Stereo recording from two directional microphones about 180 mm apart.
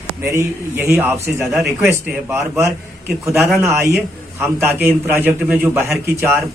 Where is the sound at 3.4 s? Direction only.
Centre (ahead or behind).